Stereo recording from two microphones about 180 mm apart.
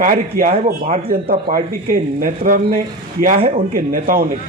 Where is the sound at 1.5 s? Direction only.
50° right (ahead or behind).